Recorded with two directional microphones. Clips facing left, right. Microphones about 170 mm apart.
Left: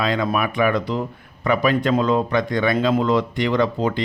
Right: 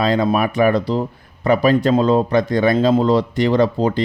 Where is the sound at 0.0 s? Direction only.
35° right (ahead or behind).